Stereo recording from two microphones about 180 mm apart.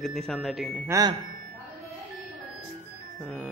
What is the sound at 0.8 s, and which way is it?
Speech, 20° right (ahead or behind).